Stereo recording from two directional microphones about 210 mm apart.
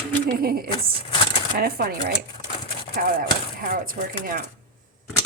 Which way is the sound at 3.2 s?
40° right (ahead or behind).